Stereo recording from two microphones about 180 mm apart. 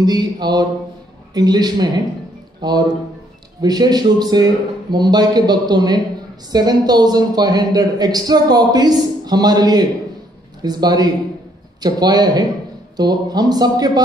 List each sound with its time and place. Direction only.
0.0 s a man's voice: 20° right (ahead or behind)